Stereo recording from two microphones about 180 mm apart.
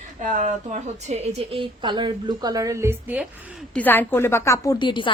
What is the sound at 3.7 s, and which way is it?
A woman's voice, 10° left (ahead or behind).